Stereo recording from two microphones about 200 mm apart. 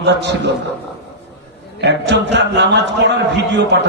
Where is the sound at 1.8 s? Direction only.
60° right (ahead or behind).